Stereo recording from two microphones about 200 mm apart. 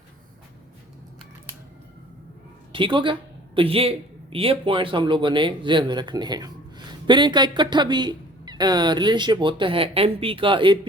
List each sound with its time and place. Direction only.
2.7 s speech: 25° right (ahead or behind)